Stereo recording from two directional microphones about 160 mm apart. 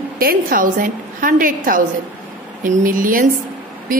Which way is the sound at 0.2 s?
65° right (ahead or behind).